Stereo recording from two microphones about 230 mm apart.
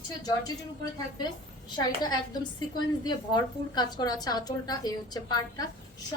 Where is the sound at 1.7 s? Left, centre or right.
Centre.